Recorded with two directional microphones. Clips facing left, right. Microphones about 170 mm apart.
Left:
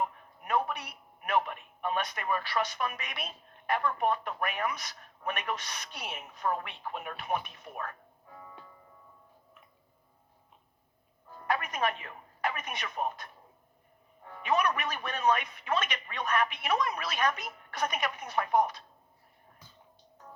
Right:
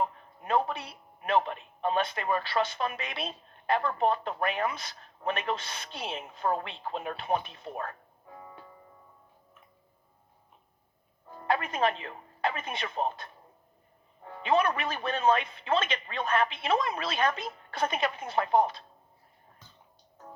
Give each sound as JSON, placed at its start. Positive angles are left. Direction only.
{"t": 0.0, "sound": "a man's voice", "side_deg": -30}
{"t": 11.3, "sound": "speech", "side_deg": -25}